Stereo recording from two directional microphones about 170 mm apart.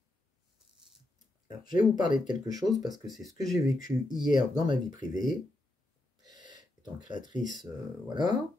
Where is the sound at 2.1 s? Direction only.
25° right (ahead or behind).